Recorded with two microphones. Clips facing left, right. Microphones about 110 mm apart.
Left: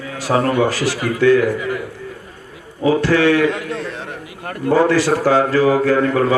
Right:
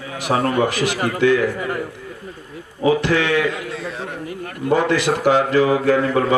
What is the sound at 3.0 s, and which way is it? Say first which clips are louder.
Speech: left 5 dB; 20° right (ahead or behind).